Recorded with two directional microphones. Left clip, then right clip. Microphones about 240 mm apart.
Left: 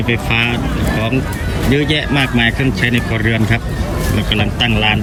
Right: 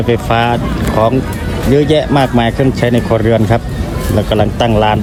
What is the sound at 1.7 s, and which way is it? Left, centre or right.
Speech, centre.